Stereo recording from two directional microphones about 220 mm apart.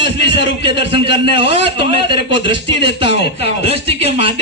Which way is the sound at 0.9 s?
25° right (ahead or behind).